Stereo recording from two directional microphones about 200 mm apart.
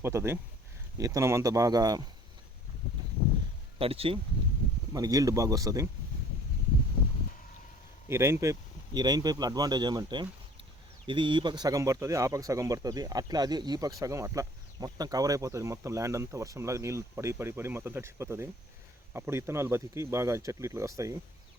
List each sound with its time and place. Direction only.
0.0 s speech: 10° right (ahead or behind)
3.8 s speech: 30° right (ahead or behind)
4.9 s speech: 20° right (ahead or behind)
8.0 s speech: 15° right (ahead or behind)